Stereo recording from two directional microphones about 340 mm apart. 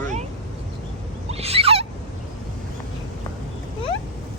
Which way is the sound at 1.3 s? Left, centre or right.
Centre.